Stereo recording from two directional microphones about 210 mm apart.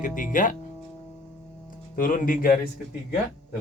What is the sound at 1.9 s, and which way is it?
Speech, 40° left (ahead or behind).